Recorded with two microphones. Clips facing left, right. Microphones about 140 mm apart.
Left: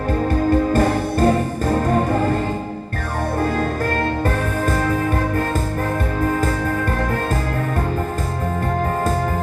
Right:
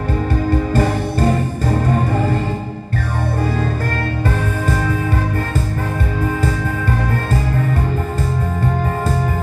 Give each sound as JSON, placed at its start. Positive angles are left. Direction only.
{"t": 0.7, "sound": "music", "side_deg": 45}